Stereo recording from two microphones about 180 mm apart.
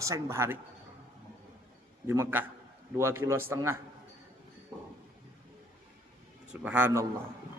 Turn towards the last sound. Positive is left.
turn(degrees=-15)  # may be behind; listen again after turning